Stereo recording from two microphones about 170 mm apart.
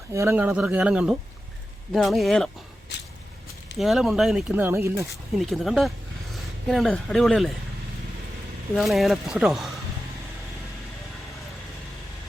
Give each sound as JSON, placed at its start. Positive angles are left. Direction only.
{"t": 0.1, "sound": "speech", "side_deg": -15}
{"t": 2.9, "sound": "walk", "side_deg": 80}
{"t": 3.8, "sound": "speech", "side_deg": 0}
{"t": 4.5, "sound": "speech", "side_deg": -15}
{"t": 5.4, "sound": "speech", "side_deg": 0}
{"t": 8.7, "sound": "speech", "side_deg": 0}